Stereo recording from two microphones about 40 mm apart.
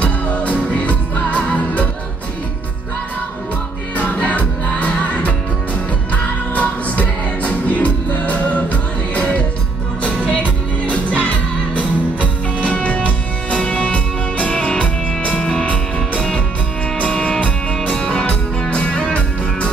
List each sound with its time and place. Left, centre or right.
0.0 s music: left
3.9 s music: left
10.9 s music: left
15.3 s music: left
15.6 s music: left
17.9 s music: centre
18.2 s music: left